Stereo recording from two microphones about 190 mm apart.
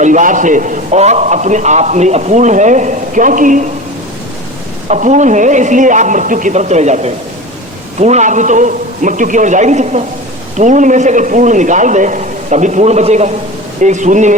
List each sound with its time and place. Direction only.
0.0 s a man's voice: 40° right (ahead or behind)
4.9 s a man's voice: 40° right (ahead or behind)